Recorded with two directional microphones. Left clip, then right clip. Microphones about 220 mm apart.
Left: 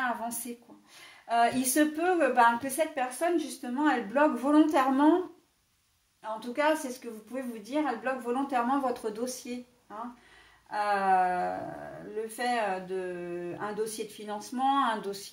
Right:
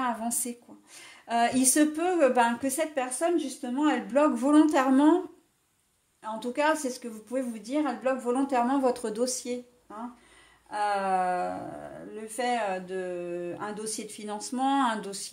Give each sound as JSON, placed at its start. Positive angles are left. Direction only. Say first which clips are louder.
{"t": 0.0, "sound": "a sound", "louder": "right 1 dB", "side_deg": -40}
{"t": 1.2, "sound": "speech", "louder": "right 1 dB", "side_deg": -45}
{"t": 6.5, "sound": "speech", "louder": "right 1 dB", "side_deg": -45}
{"t": 10.7, "sound": "speech", "louder": "left 1 dB", "side_deg": -45}
{"t": 12.5, "sound": "speech", "louder": "even", "side_deg": -40}